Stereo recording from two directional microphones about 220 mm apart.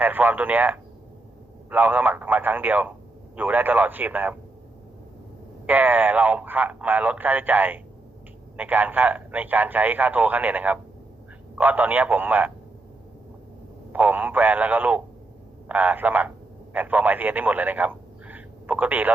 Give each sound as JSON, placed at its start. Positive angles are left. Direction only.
{"t": 0.0, "sound": "a man's voice", "side_deg": -10}
{"t": 5.6, "sound": "a man's voice", "side_deg": -10}
{"t": 13.9, "sound": "a man's voice", "side_deg": -10}